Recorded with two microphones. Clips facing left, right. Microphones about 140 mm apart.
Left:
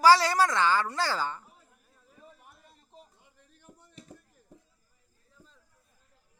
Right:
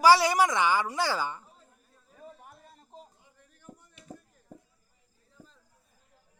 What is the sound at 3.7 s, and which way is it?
Chop, 40° right (ahead or behind).